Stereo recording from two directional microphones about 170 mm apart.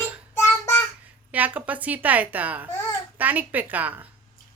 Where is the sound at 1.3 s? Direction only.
10° right (ahead or behind).